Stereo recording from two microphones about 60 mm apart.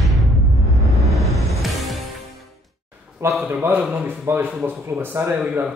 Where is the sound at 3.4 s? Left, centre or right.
Right.